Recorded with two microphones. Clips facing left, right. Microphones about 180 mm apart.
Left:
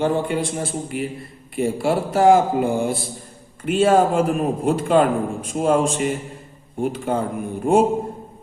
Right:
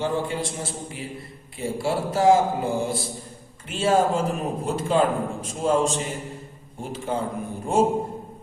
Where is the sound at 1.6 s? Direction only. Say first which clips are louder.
Left 5 dB; 60° left (ahead or behind).